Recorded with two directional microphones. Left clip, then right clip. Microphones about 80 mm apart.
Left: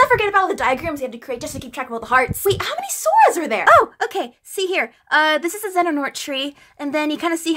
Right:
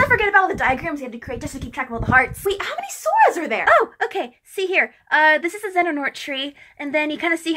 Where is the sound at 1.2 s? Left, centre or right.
Left.